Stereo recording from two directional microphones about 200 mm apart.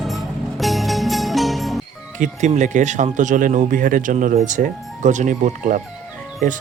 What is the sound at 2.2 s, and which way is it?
Speech, 35° right (ahead or behind).